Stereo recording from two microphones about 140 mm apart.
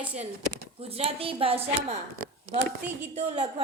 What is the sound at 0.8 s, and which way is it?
A woman's voice, 45° right (ahead or behind).